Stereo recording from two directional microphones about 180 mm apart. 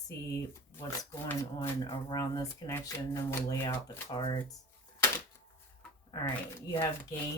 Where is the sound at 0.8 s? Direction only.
15° left (ahead or behind).